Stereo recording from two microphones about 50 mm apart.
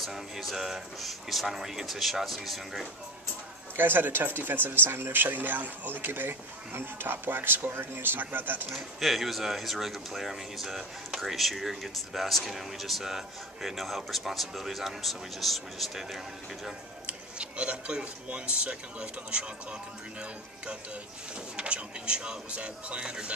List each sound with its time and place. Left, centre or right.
0.0 s speech: centre
3.7 s speech: right
8.6 s speech: centre
17.0 s speech: right
21.5 s speech: centre